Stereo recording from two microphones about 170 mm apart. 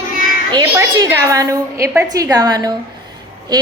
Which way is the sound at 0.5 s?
20° right (ahead or behind).